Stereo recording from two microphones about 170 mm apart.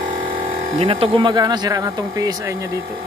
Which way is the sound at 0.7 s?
35° right (ahead or behind).